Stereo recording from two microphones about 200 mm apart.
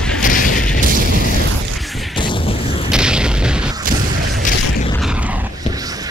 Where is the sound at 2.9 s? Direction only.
5° right (ahead or behind).